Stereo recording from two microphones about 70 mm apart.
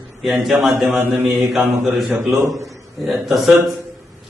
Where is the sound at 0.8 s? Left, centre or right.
Right.